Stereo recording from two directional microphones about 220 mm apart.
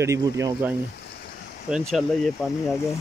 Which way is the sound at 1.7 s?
Centre (ahead or behind).